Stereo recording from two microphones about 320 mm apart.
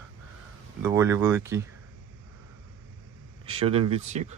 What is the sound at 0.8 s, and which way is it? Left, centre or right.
Speech, centre.